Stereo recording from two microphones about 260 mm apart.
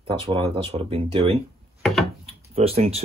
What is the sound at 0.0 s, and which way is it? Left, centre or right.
Speech, centre.